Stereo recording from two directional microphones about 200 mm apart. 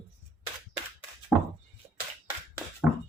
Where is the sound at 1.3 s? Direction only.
Centre (ahead or behind).